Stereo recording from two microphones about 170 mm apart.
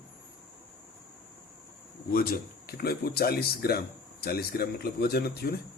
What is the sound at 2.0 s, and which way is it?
A man's voice, 60° left (ahead or behind).